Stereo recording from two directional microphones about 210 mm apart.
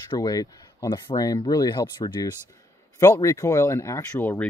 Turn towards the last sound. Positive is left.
turn(degrees=10)  # may be behind; listen again after turning